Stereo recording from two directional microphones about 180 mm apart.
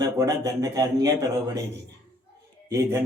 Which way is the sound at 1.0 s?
15° right (ahead or behind).